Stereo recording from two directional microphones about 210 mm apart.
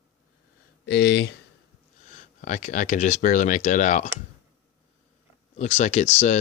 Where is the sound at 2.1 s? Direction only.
35° left (ahead or behind).